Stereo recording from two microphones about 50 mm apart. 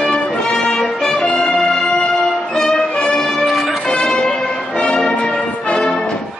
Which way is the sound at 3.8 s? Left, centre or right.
Centre.